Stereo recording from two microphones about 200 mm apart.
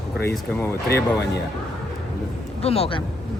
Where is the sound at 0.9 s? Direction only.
55° left (ahead or behind).